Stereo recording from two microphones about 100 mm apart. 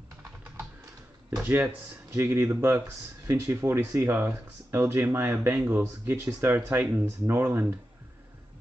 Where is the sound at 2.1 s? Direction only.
25° right (ahead or behind).